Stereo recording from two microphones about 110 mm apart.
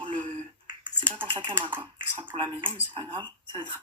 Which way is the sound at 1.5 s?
20° right (ahead or behind).